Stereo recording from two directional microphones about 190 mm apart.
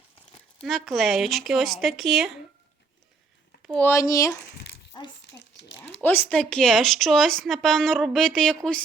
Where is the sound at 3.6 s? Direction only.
5° left (ahead or behind); by 5.1 s 25° left (ahead or behind).